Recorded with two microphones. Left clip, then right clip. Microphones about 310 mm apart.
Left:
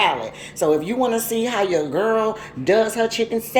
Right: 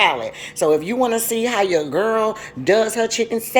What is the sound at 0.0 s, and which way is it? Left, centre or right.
A woman's voice, centre.